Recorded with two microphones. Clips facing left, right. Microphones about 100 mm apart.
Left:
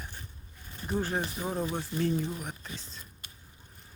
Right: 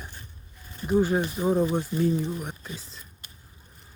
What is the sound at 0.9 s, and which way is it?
Speech, 10° right (ahead or behind).